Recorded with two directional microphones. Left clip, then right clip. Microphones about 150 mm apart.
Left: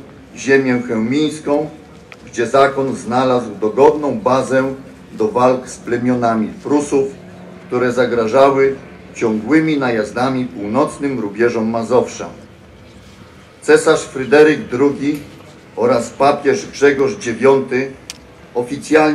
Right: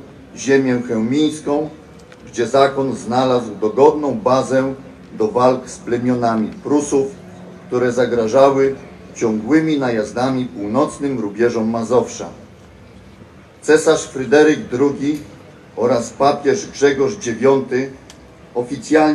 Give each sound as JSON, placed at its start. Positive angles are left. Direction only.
{"t": 0.8, "sound": "a man's voice", "side_deg": 10}
{"t": 13.7, "sound": "a man's voice", "side_deg": 10}